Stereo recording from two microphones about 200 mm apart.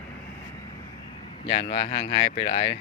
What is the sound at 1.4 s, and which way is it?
Speech, 30° left (ahead or behind).